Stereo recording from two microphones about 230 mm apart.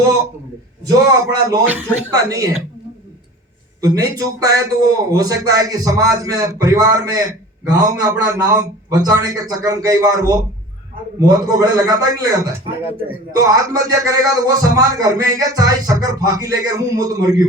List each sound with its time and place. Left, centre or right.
0.9 s a man's voice: centre
3.8 s a man's voice: centre